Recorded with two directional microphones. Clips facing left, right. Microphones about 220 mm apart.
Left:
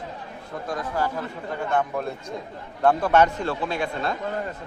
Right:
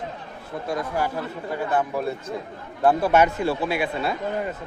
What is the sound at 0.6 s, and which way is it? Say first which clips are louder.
Speech: right 1 dB; 10° right (ahead or behind).